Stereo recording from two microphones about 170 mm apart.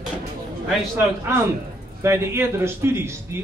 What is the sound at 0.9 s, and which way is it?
A man's voice, 15° right (ahead or behind).